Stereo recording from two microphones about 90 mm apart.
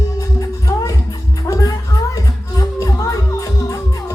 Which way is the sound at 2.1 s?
40° left (ahead or behind).